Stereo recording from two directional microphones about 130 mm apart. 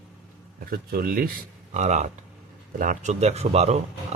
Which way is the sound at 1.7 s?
60° right (ahead or behind).